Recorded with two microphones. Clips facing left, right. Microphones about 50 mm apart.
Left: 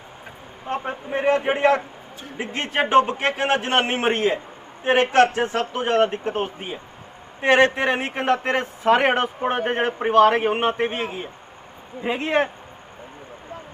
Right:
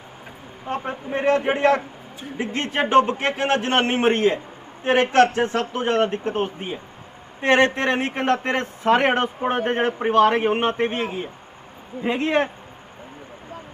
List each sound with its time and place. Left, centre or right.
0.6 s a man's voice: centre